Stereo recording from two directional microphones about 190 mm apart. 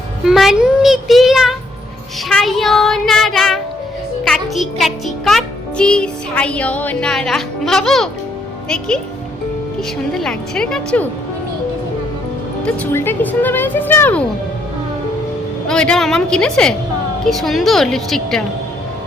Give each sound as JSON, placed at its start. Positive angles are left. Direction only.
{"t": 0.3, "sound": "a child's voice", "side_deg": 0}
{"t": 2.3, "sound": "child singing", "side_deg": 0}
{"t": 4.3, "sound": "music", "side_deg": 0}
{"t": 10.2, "sound": "a child's voice", "side_deg": 0}
{"t": 12.6, "sound": "speech", "side_deg": 10}
{"t": 15.6, "sound": "a child's voice", "side_deg": 5}